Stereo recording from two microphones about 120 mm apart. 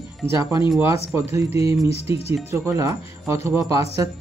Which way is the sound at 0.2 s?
20° right (ahead or behind).